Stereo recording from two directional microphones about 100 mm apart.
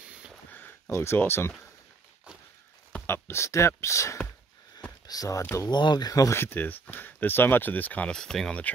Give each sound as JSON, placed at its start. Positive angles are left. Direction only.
{"t": 0.5, "sound": "a sound", "side_deg": 20}
{"t": 0.8, "sound": "speech", "side_deg": 25}
{"t": 3.1, "sound": "speech", "side_deg": 25}
{"t": 5.4, "sound": "speech", "side_deg": 25}
{"t": 5.7, "sound": "speech", "side_deg": 45}